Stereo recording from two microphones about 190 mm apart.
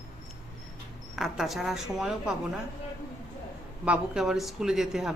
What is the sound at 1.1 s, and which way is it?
Speech, centre (ahead or behind).